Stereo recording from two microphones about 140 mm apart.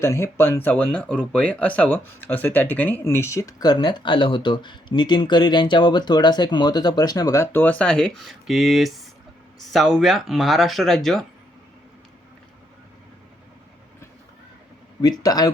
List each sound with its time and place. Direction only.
0.0 s speech: 20° left (ahead or behind); by 11.3 s centre (ahead or behind)
15.2 s speech: 25° left (ahead or behind)